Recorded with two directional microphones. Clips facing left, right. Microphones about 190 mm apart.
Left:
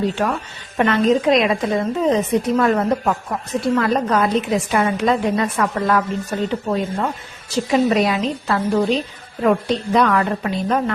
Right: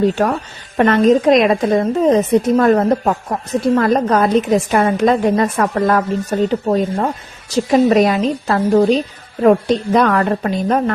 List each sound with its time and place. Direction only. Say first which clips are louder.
0.0 s a woman's voice: right 5 dB; 45° right (ahead or behind)